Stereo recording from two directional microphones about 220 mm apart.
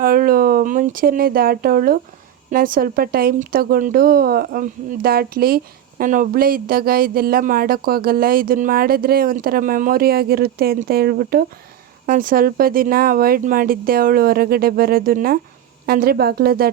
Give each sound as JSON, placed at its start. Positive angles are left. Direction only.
{"t": 0.0, "sound": "speech", "side_deg": -40}